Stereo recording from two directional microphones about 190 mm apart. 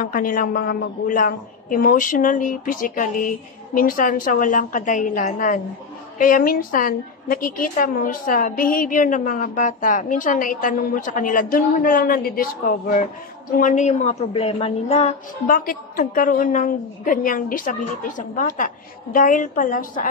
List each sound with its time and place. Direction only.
0.0 s a woman's voice: 45° left (ahead or behind)